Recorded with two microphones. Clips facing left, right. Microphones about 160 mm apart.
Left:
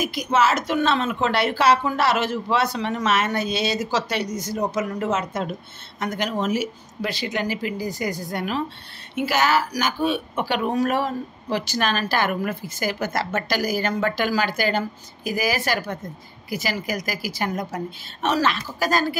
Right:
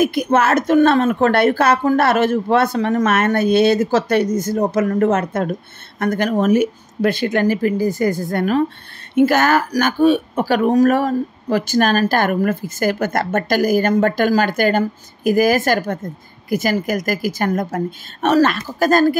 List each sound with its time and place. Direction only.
0.0 s a woman's voice: 55° right (ahead or behind)